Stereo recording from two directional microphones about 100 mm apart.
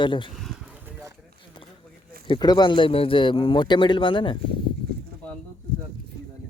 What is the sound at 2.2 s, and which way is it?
Speech, 50° left (ahead or behind).